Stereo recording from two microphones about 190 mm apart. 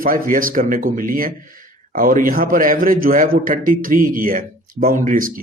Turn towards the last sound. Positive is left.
turn(degrees=-45)  # may be behind; listen again after turning